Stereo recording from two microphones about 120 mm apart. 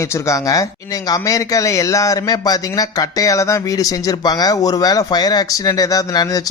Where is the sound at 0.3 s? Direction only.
30° left (ahead or behind).